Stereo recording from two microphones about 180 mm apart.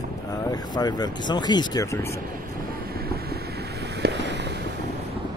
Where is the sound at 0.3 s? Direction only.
20° left (ahead or behind).